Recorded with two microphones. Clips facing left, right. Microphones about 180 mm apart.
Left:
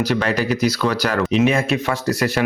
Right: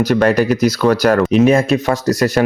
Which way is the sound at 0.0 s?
45° right (ahead or behind).